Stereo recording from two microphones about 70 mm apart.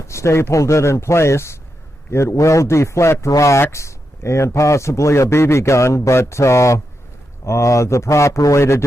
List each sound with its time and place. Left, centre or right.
0.0 s a man's voice: left